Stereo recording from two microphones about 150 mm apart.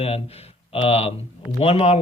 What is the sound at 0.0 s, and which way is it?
Speech, 45° left (ahead or behind).